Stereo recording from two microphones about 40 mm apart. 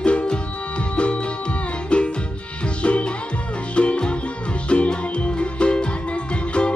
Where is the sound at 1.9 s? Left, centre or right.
Left.